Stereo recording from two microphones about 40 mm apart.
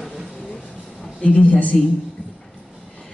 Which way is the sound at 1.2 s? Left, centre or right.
Left.